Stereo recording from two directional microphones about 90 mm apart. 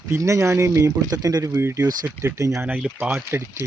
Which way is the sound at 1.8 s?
40° right (ahead or behind).